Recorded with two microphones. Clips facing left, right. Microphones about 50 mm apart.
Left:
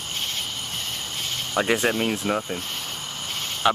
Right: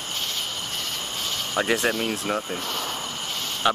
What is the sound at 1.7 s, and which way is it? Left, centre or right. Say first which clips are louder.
Speech: left 2 dB; centre.